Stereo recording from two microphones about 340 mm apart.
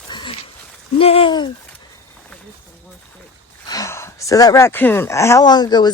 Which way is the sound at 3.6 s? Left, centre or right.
Centre.